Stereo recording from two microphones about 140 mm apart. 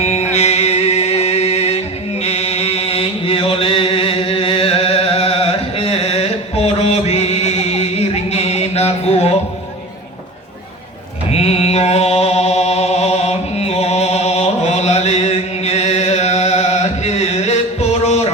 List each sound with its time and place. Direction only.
0.0 s music: 50° left (ahead or behind)
11.3 s mantra: 50° left (ahead or behind)